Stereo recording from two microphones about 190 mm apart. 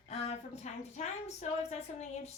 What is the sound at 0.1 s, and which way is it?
Speech, 35° left (ahead or behind).